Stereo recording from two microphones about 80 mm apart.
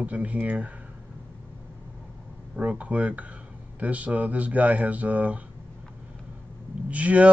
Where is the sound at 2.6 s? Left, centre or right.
Centre.